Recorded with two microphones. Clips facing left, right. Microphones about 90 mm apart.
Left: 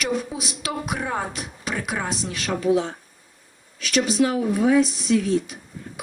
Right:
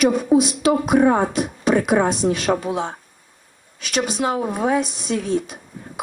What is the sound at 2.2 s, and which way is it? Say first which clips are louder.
Speech: right 10 dB; 50° right (ahead or behind).